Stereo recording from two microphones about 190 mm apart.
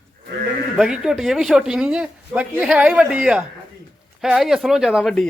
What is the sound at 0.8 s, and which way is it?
A man's voice, 5° right (ahead or behind).